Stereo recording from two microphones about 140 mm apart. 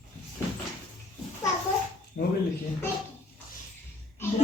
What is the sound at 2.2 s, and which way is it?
Speech, 70° left (ahead or behind).